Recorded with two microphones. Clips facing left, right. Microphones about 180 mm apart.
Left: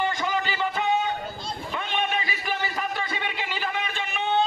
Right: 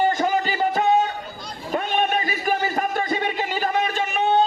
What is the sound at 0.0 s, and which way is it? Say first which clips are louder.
Music: right 6 dB; 45° right (ahead or behind).